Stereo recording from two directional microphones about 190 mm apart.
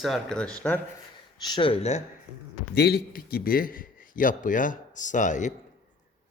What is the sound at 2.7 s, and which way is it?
A man's voice, 55° left (ahead or behind).